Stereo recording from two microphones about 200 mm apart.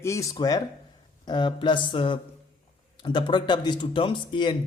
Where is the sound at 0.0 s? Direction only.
15° left (ahead or behind).